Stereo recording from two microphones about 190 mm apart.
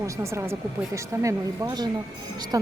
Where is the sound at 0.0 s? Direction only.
15° right (ahead or behind).